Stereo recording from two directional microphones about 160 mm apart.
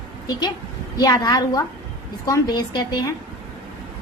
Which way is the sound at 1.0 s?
25° left (ahead or behind).